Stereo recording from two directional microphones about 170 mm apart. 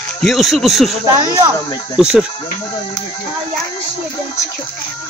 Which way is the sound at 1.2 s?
20° right (ahead or behind).